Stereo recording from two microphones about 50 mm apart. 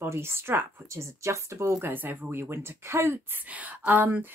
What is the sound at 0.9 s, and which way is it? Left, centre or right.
Speech, right.